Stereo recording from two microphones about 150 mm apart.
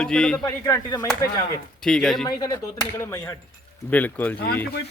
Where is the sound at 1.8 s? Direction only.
5° left (ahead or behind).